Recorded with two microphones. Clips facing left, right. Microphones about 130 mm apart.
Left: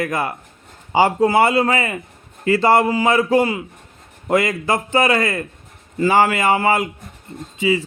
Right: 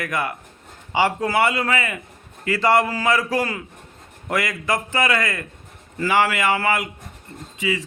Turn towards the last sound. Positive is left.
turn(degrees=30)  # may be behind; listen again after turning